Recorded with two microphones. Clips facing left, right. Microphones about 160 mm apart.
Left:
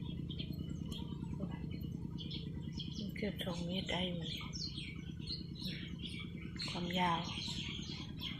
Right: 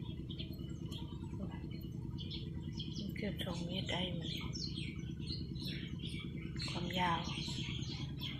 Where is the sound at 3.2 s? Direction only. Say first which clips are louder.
Left 2 dB; centre (ahead or behind).